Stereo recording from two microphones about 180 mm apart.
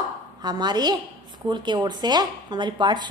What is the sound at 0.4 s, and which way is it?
Speech, 25° right (ahead or behind).